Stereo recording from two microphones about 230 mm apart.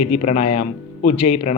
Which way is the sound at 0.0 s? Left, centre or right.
Left.